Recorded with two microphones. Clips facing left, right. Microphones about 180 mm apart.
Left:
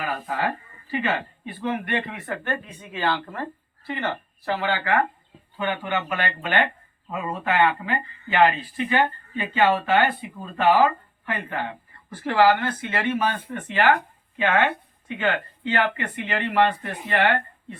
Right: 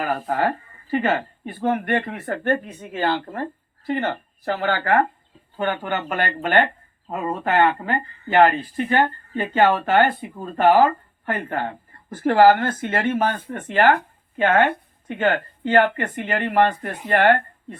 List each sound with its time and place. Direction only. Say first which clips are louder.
0.0 s speech: right 5 dB; 45° right (ahead or behind)